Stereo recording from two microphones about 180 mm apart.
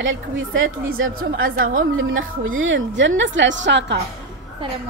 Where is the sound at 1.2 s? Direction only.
50° right (ahead or behind).